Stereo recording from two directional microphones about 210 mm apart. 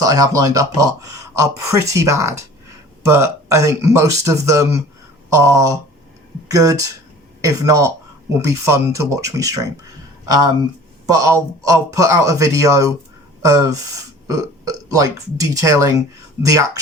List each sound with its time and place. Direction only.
0.0 s speech: 15° right (ahead or behind)